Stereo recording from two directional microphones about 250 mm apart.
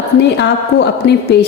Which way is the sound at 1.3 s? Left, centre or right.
Left.